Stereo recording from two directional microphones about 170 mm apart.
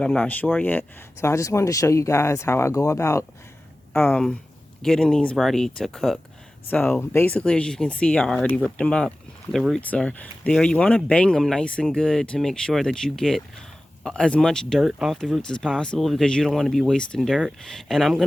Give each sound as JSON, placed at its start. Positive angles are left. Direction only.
{"t": 0.0, "sound": "speech", "side_deg": 5}
{"t": 6.7, "sound": "speech", "side_deg": 10}